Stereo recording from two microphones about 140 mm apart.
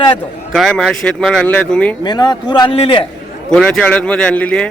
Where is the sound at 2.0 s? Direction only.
30° left (ahead or behind).